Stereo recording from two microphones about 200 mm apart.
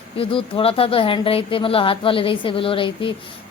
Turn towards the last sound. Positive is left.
turn(degrees=25)  # may be behind; listen again after turning